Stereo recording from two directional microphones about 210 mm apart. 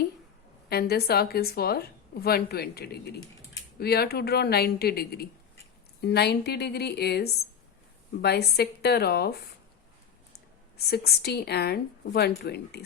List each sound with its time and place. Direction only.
0.7 s a woman's voice: 50° left (ahead or behind)